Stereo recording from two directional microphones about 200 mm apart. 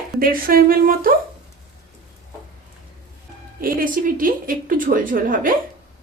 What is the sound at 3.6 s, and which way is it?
Speech, 45° right (ahead or behind).